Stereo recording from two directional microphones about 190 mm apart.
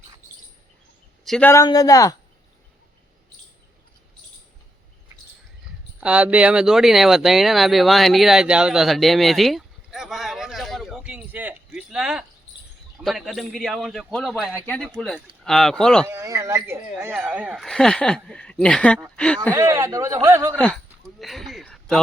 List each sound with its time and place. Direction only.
1.2 s a man's voice: 5° left (ahead or behind)
6.0 s speech: 5° right (ahead or behind)
16.0 s speech: 15° right (ahead or behind); by 19.4 s 5° left (ahead or behind)
19.5 s speech: 15° right (ahead or behind)
21.2 s a man's voice: centre (ahead or behind)